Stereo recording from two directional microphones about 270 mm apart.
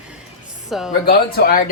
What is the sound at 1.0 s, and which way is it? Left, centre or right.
Speech, left.